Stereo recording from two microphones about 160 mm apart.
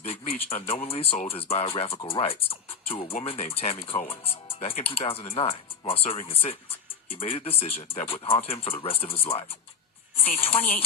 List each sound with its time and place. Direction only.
0.0 s speech: 35° left (ahead or behind)